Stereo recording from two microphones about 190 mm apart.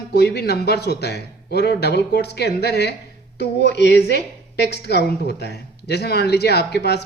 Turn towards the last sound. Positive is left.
turn(degrees=60)  # may be behind; listen again after turning